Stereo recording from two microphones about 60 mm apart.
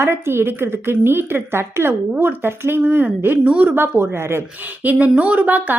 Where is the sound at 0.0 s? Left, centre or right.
Right.